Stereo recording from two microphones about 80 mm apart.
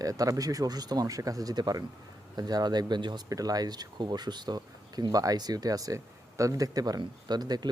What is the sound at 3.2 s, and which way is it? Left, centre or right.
Speech, right.